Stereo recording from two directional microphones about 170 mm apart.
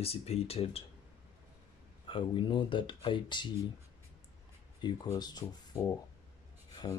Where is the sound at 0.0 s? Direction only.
35° left (ahead or behind).